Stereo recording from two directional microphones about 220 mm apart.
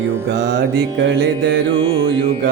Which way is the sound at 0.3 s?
50° right (ahead or behind).